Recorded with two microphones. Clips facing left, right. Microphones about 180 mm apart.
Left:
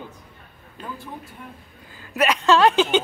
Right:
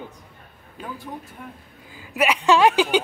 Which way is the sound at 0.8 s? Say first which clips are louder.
Right 1 dB; 10° right (ahead or behind).